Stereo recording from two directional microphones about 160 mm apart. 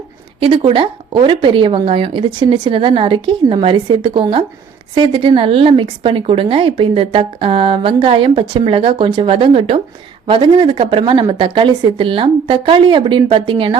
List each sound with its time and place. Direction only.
0.3 s a woman's voice: 30° right (ahead or behind)